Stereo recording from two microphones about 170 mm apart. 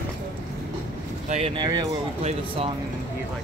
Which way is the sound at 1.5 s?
25° right (ahead or behind).